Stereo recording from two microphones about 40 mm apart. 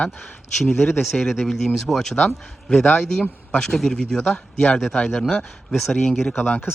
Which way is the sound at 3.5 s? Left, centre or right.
Centre.